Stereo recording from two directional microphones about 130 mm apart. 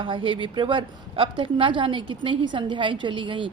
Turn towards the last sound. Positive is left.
turn(degrees=-40)  # may be behind; listen again after turning